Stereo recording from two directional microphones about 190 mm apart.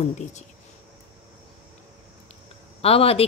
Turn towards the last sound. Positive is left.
turn(degrees=30)  # may be behind; listen again after turning